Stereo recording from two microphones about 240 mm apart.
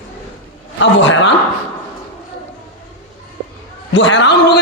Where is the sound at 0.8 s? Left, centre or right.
Left.